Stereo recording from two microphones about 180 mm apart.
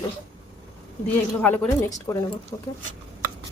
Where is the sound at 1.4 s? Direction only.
10° left (ahead or behind).